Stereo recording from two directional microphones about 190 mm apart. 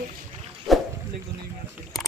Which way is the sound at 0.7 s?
Centre (ahead or behind).